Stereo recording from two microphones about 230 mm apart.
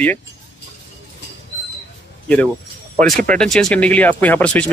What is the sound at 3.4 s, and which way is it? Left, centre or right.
Speech, centre.